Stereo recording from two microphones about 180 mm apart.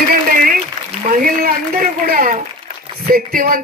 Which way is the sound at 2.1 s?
50° right (ahead or behind).